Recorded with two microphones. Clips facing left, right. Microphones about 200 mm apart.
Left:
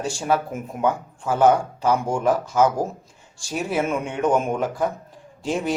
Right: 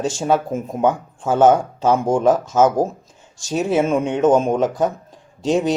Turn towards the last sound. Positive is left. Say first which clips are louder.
# right 6 dB
turn(degrees=-25)  # may be behind; listen again after turning